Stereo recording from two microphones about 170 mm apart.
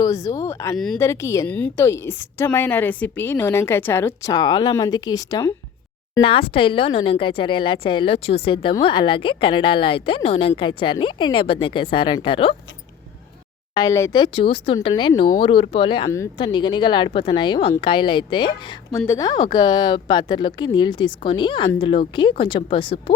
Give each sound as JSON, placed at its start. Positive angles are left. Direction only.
{"t": 0.0, "sound": "a woman's voice", "side_deg": 20}
{"t": 13.7, "sound": "a woman's voice", "side_deg": 20}
{"t": 16.0, "sound": "a woman's voice", "side_deg": 15}
{"t": 16.4, "sound": "a woman's voice", "side_deg": 30}